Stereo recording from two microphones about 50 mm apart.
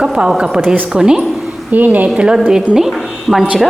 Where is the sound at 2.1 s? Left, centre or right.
Centre.